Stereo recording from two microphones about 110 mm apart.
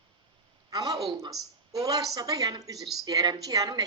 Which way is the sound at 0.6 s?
35° right (ahead or behind).